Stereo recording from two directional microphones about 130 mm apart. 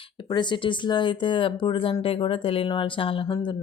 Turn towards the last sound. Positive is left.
turn(degrees=45)  # may be behind; listen again after turning